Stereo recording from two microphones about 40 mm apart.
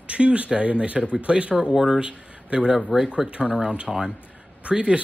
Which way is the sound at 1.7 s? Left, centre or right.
Centre.